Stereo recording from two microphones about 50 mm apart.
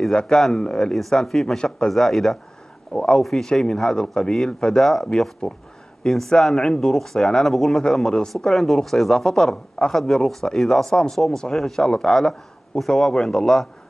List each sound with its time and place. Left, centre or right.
0.1 s speech: centre
1.9 s a man's voice: centre
2.9 s speech: centre
3.2 s a man's voice: centre
4.7 s speech: centre